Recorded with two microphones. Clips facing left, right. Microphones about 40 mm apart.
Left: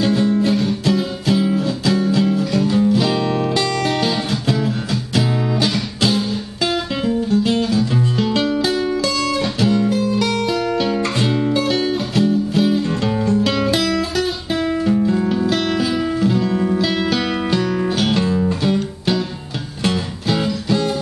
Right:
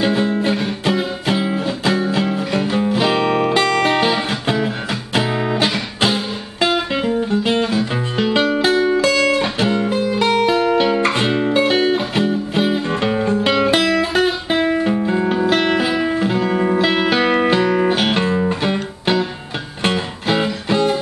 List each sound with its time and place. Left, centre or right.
0.0 s music: right